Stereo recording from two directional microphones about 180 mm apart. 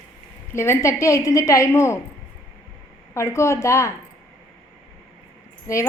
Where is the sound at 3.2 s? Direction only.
15° left (ahead or behind).